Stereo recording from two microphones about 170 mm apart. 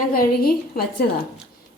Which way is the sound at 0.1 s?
60° left (ahead or behind).